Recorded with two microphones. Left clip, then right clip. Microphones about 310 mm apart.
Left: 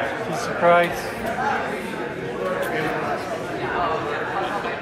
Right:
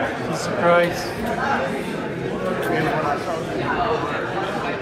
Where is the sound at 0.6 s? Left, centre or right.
Left.